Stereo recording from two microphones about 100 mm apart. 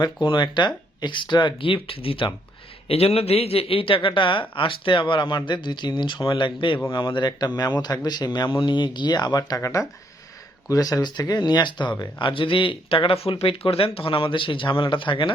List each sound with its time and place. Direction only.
0.0 s speech: 50° left (ahead or behind); by 2.3 s 65° left (ahead or behind)
2.8 s speech: 85° left; by 9.6 s 40° left (ahead or behind)
9.6 s speech: 30° left (ahead or behind); by 15.3 s 55° left (ahead or behind)